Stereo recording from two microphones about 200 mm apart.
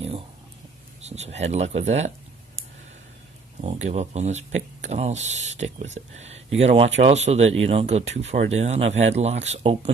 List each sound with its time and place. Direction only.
1.0 s speech: 35° right (ahead or behind)
3.6 s speech: 35° right (ahead or behind)